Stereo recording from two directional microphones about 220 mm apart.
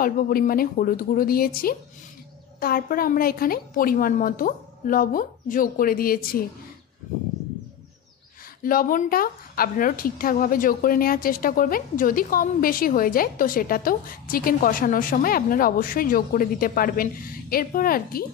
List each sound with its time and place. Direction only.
0.0 s a woman's voice: 40° left (ahead or behind)
8.6 s a woman's voice: 40° left (ahead or behind)